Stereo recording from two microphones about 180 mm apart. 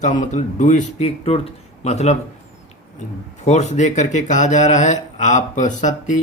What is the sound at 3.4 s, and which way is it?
Speech, 40° left (ahead or behind).